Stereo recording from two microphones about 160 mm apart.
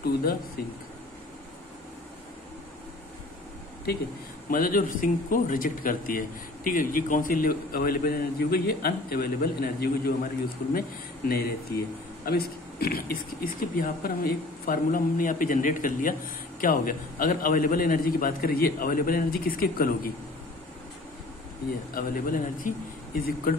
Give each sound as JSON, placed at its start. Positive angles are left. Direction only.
{"t": 0.0, "sound": "a man's voice", "side_deg": 70}
{"t": 4.5, "sound": "a man's voice", "side_deg": 60}
{"t": 21.9, "sound": "a man's voice", "side_deg": 60}